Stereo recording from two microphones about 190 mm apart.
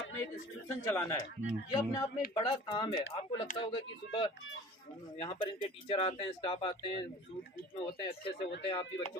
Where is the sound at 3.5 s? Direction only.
40° left (ahead or behind).